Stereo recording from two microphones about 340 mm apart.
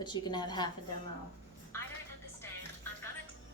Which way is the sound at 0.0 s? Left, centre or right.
Centre.